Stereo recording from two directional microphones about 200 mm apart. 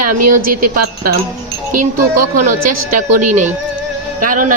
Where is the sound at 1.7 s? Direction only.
40° right (ahead or behind).